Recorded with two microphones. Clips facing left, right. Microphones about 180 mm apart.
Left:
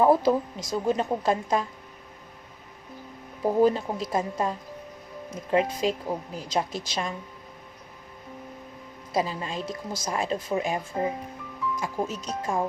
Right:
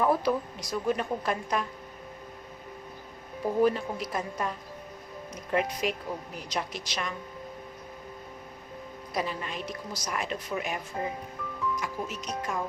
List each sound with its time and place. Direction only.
0.3 s a woman's voice: 25° left (ahead or behind)
3.6 s a woman's voice: 25° left (ahead or behind)
9.1 s a woman's voice: 25° left (ahead or behind)